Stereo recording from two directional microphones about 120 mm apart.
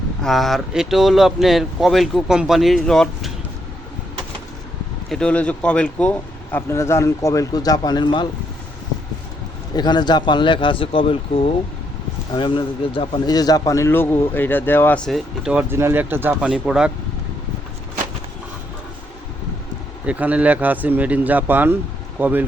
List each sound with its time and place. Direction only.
0.2 s speech: centre (ahead or behind)
5.0 s speech: 5° left (ahead or behind)
6.7 s speech: 20° left (ahead or behind); by 8.3 s 40° left (ahead or behind)
9.7 s speech: 35° left (ahead or behind)
13.2 s a man's voice: 35° left (ahead or behind); by 15.0 s 15° left (ahead or behind)
15.0 s speech: centre (ahead or behind)
15.7 s speech: 20° right (ahead or behind)
16.5 s speech: 5° right (ahead or behind)
20.1 s speech: 10° right (ahead or behind)